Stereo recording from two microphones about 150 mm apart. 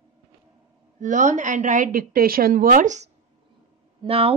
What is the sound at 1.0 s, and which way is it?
A woman's voice, 55° right (ahead or behind).